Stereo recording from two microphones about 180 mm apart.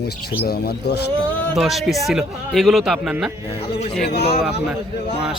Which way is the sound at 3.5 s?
35° left (ahead or behind).